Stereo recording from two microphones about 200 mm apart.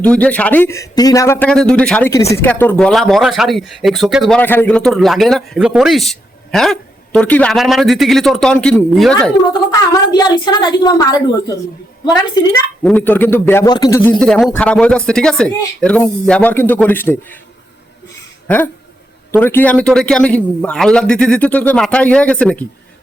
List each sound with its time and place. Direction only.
0.0 s speech: 5° left (ahead or behind)
9.5 s a woman's voice: 20° left (ahead or behind)
12.8 s speech: 5° left (ahead or behind)
14.2 s speech: 5° left (ahead or behind)
18.4 s a sound: 10° left (ahead or behind)
19.3 s speech: 10° left (ahead or behind)